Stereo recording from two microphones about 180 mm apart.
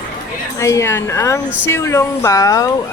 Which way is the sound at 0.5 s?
15° left (ahead or behind).